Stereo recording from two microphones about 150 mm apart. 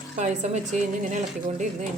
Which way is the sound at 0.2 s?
50° right (ahead or behind).